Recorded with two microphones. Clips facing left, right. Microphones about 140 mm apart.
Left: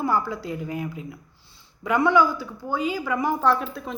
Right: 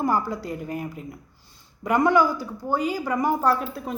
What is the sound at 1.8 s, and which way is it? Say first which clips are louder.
A woman's voice: even; 40° right (ahead or behind).